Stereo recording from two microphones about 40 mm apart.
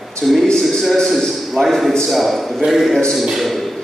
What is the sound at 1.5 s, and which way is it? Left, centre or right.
A man's voice, centre.